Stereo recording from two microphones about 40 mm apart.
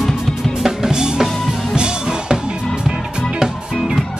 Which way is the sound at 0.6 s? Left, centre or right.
Centre.